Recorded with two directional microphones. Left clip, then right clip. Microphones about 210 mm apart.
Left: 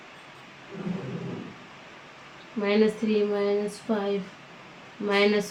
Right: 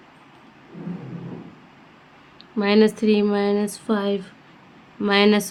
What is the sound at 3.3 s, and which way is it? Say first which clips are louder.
Speech: right 4 dB; 50° right (ahead or behind).